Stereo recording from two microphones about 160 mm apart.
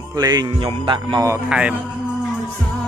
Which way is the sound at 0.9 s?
20° right (ahead or behind).